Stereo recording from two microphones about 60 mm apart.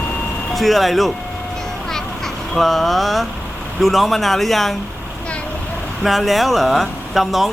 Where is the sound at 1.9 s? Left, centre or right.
Centre.